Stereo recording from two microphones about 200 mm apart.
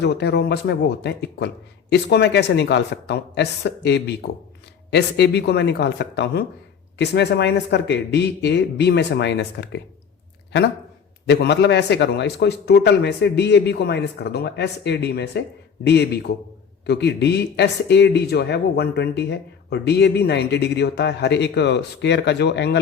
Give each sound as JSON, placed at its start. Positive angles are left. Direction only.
{"t": 0.0, "sound": "speech", "side_deg": 55}
{"t": 11.3, "sound": "speech", "side_deg": 60}